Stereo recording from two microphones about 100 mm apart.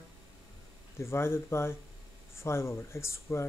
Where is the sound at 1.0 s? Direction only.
25° left (ahead or behind).